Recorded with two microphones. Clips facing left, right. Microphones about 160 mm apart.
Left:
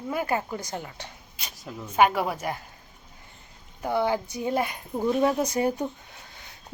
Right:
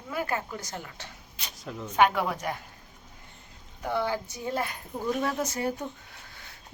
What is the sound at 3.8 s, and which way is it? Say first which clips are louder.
A woman's voice: left 4 dB; 15° left (ahead or behind).